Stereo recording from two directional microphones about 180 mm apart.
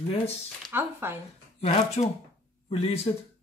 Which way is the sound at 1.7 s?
35° left (ahead or behind).